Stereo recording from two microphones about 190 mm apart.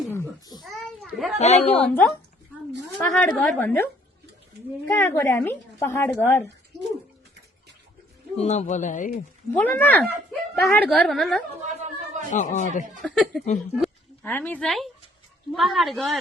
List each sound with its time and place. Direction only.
0.1 s a sound: 15° left (ahead or behind)
0.6 s children playing: centre (ahead or behind)
1.4 s a man's voice: 35° left (ahead or behind)
1.9 s a woman's voice: 10° left (ahead or behind)
4.9 s a woman's voice: 15° left (ahead or behind)
8.4 s a man's voice: 35° left (ahead or behind)
9.6 s a woman's voice: 10° left (ahead or behind)
11.6 s chatter: 40° right (ahead or behind)
12.3 s a man's voice: 40° left (ahead or behind)
13.0 s a woman's voice: 5° left (ahead or behind)